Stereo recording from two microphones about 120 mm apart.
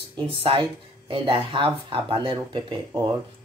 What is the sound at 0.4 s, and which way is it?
Speech, 50° right (ahead or behind).